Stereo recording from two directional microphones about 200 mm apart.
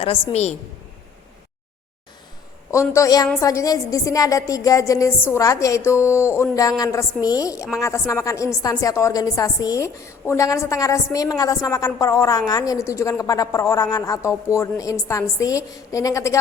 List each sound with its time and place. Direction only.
0.0 s a woman's voice: 25° left (ahead or behind)
2.7 s a woman's voice: 15° left (ahead or behind)